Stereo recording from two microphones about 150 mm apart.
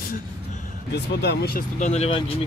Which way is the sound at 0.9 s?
90° left.